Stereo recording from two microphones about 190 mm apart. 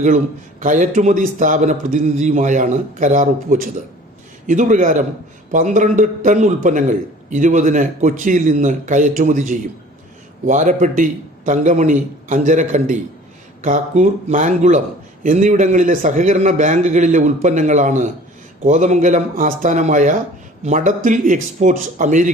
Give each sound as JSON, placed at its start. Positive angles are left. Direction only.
{"t": 0.6, "sound": "a man's voice", "side_deg": -40}